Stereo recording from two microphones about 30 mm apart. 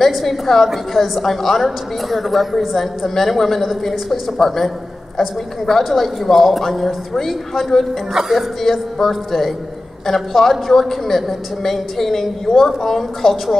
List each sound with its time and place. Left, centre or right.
0.1 s a woman's voice: centre
5.7 s a woman's voice: centre
8.1 s speech: centre
8.4 s a woman's voice: centre